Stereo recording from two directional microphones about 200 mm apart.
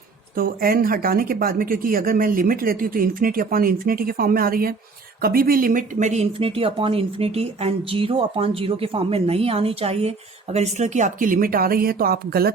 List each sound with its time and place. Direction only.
0.3 s speech: 45° right (ahead or behind)